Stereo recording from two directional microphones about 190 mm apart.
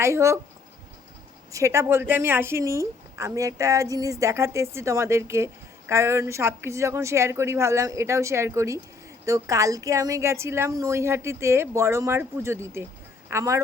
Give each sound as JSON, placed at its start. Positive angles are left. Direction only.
{"t": 0.0, "sound": "a woman's voice", "side_deg": -15}
{"t": 1.5, "sound": "a woman's voice", "side_deg": -15}